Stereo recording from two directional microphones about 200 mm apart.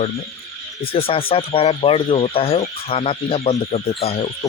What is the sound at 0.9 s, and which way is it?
Speech, 25° left (ahead or behind).